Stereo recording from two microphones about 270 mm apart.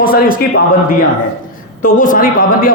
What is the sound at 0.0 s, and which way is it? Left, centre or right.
Speech, left.